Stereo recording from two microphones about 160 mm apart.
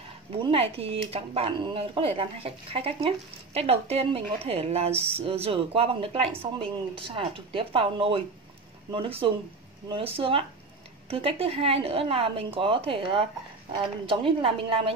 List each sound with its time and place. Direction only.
0.4 s speech: 35° right (ahead or behind)